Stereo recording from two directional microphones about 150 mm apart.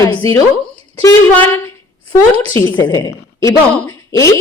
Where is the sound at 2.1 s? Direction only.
15° left (ahead or behind).